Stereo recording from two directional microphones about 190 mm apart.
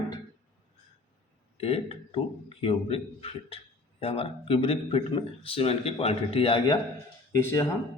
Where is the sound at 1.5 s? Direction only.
30° left (ahead or behind).